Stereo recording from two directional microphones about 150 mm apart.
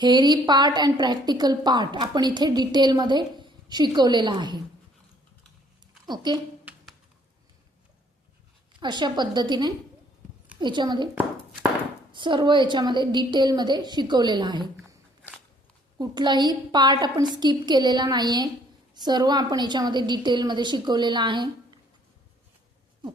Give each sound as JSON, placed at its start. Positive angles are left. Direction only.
{"t": 0.0, "sound": "a woman's voice", "side_deg": -30}
{"t": 6.1, "sound": "a woman's voice", "side_deg": -30}
{"t": 6.7, "sound": "a sound", "side_deg": -10}
{"t": 8.8, "sound": "a woman's voice", "side_deg": -30}
{"t": 12.1, "sound": "a woman's voice", "side_deg": -30}
{"t": 16.0, "sound": "a woman's voice", "side_deg": -30}